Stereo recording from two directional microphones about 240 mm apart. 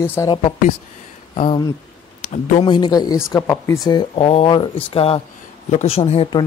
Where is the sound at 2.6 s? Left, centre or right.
Centre.